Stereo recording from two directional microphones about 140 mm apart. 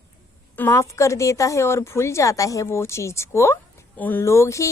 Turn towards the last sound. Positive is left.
turn(degrees=20)  # may be behind; listen again after turning